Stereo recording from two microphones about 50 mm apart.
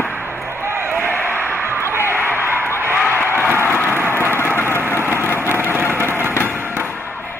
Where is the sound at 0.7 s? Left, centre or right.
Right.